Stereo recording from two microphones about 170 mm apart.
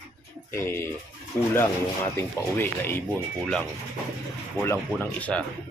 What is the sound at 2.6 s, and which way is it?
Speech, 10° left (ahead or behind).